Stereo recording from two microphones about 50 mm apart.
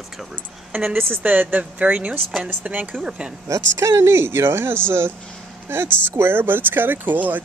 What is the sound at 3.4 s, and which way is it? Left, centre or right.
Speech, right.